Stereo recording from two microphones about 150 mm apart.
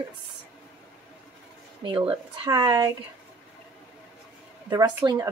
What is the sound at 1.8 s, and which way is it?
Speech, 35° right (ahead or behind).